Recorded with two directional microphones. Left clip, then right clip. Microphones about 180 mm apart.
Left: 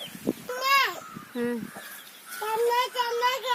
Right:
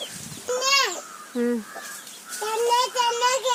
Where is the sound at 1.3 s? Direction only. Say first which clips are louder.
Right 5 dB; 40° left (ahead or behind).